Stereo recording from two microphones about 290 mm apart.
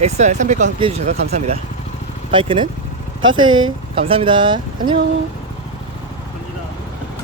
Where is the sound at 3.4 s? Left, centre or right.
Right.